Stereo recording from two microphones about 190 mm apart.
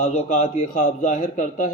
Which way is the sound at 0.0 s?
40° left (ahead or behind).